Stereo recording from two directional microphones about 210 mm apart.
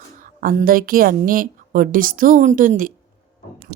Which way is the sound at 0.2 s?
40° right (ahead or behind).